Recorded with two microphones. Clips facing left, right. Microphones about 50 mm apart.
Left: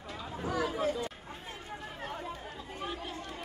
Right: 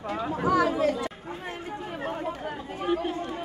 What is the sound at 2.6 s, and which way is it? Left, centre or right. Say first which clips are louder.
Chatter: right 13 dB; right.